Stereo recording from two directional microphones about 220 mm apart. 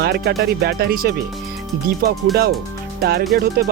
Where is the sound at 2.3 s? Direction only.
45° right (ahead or behind).